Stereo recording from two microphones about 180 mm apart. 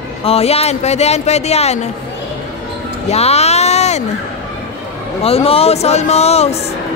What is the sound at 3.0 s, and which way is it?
Speech, 35° left (ahead or behind).